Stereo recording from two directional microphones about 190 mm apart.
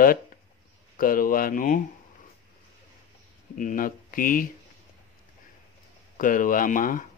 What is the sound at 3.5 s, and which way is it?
Speech, 45° left (ahead or behind).